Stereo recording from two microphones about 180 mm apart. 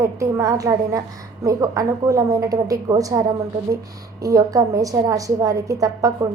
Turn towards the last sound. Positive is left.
turn(degrees=-20)  # may be behind; listen again after turning